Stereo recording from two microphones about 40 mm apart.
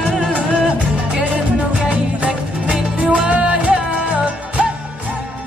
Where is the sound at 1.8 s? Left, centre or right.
Right.